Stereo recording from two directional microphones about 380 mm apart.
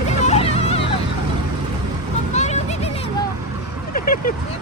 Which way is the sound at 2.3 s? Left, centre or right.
Centre.